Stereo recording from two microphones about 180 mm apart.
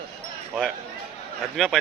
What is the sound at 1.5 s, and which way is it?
Speech, centre (ahead or behind).